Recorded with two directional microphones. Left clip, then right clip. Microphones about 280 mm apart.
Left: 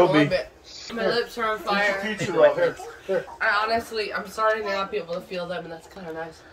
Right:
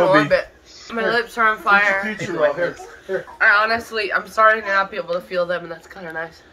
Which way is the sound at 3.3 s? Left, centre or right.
Centre.